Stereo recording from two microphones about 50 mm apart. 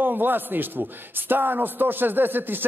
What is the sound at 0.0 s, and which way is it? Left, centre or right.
A man's voice, right.